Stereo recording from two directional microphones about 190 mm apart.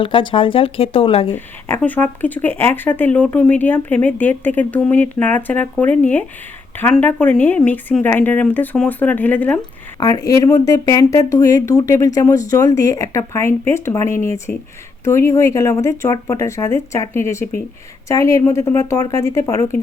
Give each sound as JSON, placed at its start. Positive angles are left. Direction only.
{"t": 0.0, "sound": "speech", "side_deg": 25}
{"t": 1.3, "sound": "speech", "side_deg": 10}
{"t": 10.0, "sound": "speech", "side_deg": 20}